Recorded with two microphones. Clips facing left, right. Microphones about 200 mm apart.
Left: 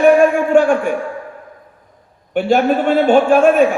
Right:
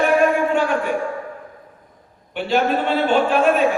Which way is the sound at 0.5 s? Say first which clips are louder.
Left 9 dB; 50° left (ahead or behind).